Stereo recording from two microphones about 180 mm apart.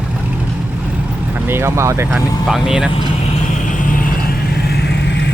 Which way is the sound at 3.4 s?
45° left (ahead or behind).